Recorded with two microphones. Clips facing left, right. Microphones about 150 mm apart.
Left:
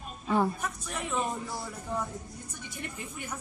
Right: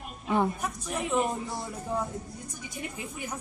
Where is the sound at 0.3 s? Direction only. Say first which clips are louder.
Right 1 dB; 15° right (ahead or behind).